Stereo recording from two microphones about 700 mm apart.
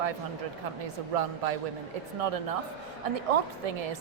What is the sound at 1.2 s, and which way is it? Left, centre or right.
Speech, right.